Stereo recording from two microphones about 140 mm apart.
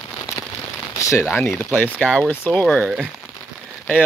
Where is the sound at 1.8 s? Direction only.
10° left (ahead or behind).